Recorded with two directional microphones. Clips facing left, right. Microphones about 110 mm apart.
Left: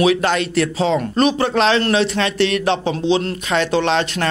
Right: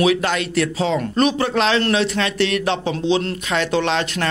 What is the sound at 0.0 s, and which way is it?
A man's voice, 35° left (ahead or behind).